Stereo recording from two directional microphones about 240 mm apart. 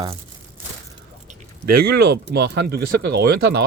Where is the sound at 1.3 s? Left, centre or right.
Right.